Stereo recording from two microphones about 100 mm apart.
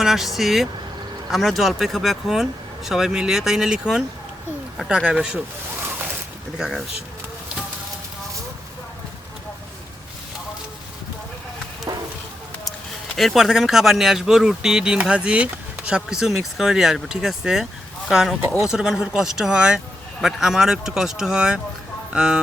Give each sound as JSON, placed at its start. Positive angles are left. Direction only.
{"t": 0.0, "sound": "speech", "side_deg": -5}
{"t": 5.0, "sound": "speech", "side_deg": -10}
{"t": 6.6, "sound": "speech", "side_deg": -5}
{"t": 11.9, "sound": "a sound", "side_deg": -35}
{"t": 13.1, "sound": "speech", "side_deg": 0}